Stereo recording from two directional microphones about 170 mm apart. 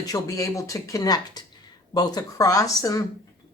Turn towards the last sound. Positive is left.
turn(degrees=20)  # may be behind; listen again after turning